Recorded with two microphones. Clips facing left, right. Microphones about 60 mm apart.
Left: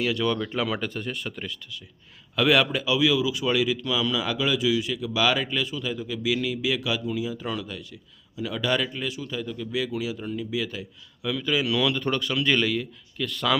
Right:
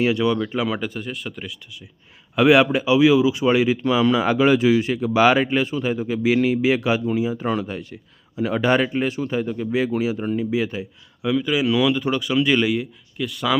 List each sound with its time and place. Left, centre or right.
0.0 s speech: right
0.3 s speech: centre
2.3 s speech: right; by 13.6 s centre